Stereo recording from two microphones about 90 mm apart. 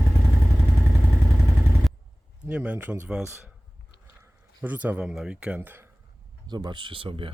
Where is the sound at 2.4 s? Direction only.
15° right (ahead or behind).